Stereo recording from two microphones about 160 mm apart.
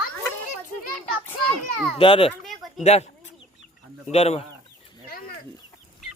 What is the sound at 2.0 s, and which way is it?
Speech, 35° left (ahead or behind).